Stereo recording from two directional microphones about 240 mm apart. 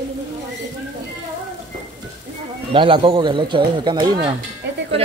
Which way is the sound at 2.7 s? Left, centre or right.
Right.